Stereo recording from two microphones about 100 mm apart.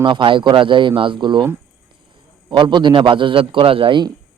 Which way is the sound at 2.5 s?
50° right (ahead or behind).